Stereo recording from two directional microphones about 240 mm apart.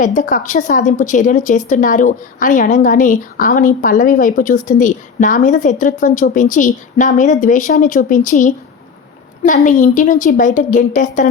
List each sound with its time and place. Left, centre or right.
0.0 s speech: left